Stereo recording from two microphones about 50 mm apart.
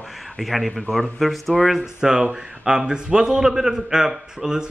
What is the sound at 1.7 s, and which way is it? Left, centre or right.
A man's voice, centre.